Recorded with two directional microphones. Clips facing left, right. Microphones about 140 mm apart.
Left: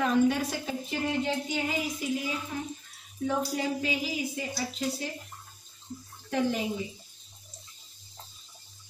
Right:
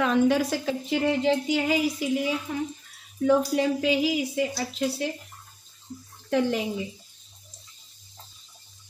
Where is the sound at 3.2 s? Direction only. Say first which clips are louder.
Right 8 dB; 85° right.